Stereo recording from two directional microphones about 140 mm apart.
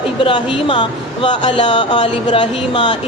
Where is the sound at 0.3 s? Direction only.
35° left (ahead or behind).